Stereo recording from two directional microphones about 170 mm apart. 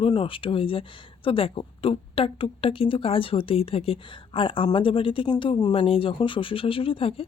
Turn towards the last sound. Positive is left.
turn(degrees=35)  # may be behind; listen again after turning